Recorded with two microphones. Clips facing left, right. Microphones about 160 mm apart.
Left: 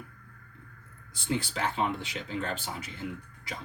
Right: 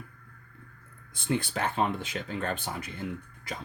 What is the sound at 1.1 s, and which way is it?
Speech, 55° right (ahead or behind).